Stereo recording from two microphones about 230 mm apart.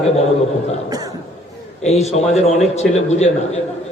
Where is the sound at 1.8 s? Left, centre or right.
Left.